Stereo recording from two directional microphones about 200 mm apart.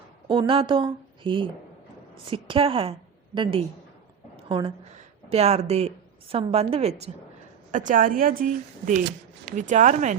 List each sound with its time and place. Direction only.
0.3 s a woman's voice: 25° right (ahead or behind)
4.4 s a sound: 25° right (ahead or behind)
4.9 s a woman's voice: 30° right (ahead or behind)